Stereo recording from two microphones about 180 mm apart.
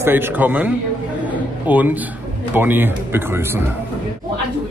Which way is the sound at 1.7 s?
10° right (ahead or behind).